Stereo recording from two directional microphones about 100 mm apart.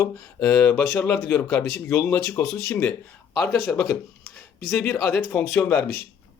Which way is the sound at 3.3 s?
5° left (ahead or behind).